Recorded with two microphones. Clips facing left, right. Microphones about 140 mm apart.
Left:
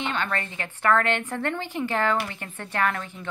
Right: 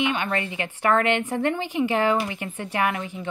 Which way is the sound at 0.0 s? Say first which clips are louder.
Right 4 dB; 15° right (ahead or behind).